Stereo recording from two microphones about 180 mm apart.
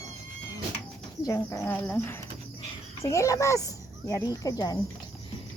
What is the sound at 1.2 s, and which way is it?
Speech, 20° left (ahead or behind).